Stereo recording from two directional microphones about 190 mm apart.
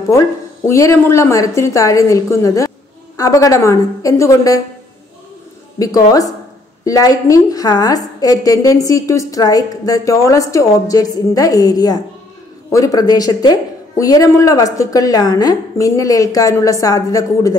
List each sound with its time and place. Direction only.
0.1 s a woman's voice: 15° left (ahead or behind)
5.8 s a woman's voice: 20° left (ahead or behind)